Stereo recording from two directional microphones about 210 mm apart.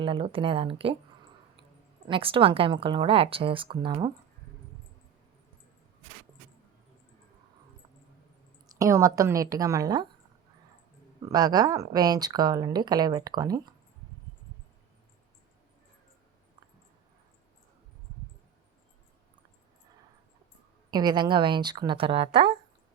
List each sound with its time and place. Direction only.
0.0 s speech: 25° right (ahead or behind)
2.0 s speech: 25° right (ahead or behind)
8.7 s speech: 15° right (ahead or behind)
11.3 s speech: 20° right (ahead or behind)
20.9 s speech: 20° right (ahead or behind)